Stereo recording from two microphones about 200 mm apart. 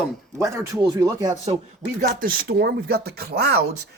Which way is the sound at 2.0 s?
50° right (ahead or behind).